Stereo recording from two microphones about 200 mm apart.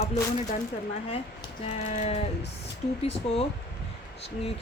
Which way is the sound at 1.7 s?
35° left (ahead or behind).